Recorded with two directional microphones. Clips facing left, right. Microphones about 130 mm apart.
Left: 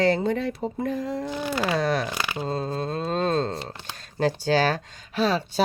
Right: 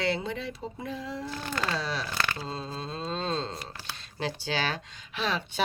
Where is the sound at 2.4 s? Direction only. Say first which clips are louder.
Left 8 dB; 50° left (ahead or behind).